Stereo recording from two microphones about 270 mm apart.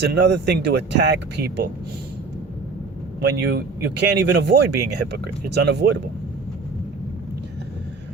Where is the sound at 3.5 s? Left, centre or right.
Right.